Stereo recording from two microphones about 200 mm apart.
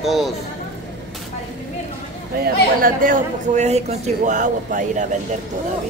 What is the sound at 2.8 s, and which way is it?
A man's voice, 40° right (ahead or behind).